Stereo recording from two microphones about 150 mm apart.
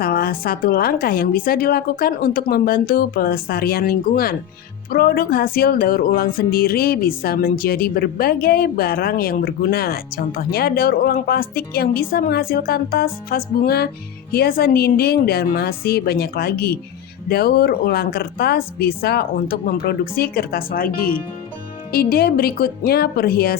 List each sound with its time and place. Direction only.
0.0 s a woman's voice: 90° left
21.9 s speech: 90° left